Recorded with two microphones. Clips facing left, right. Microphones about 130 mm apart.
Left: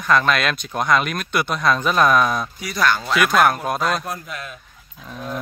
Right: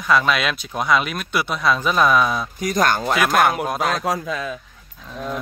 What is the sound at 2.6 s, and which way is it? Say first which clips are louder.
Speech: right 3 dB; 45° right (ahead or behind).